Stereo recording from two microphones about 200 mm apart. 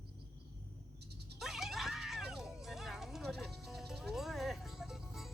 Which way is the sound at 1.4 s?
Centre (ahead or behind).